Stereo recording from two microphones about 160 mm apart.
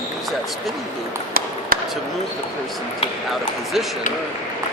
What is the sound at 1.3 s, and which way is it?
Ping, 65° right (ahead or behind).